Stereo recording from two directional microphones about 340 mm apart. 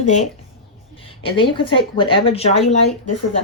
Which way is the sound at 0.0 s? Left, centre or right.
Left.